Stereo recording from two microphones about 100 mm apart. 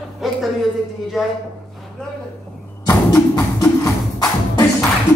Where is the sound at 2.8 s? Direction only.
40° left (ahead or behind).